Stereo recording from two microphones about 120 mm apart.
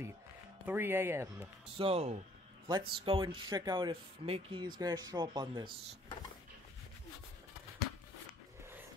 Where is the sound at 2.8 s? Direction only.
50° right (ahead or behind).